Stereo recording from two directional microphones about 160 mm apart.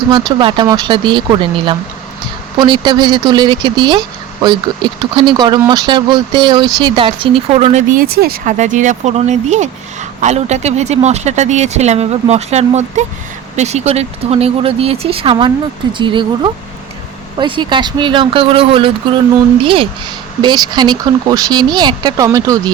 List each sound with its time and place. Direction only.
0.1 s speech: 30° right (ahead or behind)
7.9 s speech: 75° right (ahead or behind)
8.5 s speech: 50° right (ahead or behind); by 22.7 s 20° right (ahead or behind)